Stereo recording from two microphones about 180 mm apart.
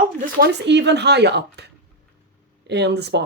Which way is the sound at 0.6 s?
75° right (ahead or behind).